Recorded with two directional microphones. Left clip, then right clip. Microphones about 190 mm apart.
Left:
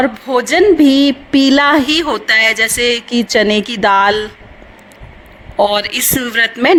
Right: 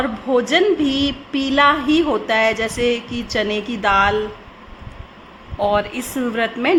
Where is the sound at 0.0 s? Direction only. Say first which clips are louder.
Left 4 dB; 40° left (ahead or behind).